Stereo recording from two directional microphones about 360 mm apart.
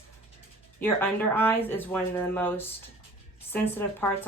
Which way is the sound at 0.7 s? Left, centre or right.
Centre.